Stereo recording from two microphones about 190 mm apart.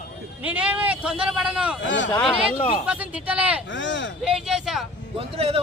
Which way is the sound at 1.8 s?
80° left.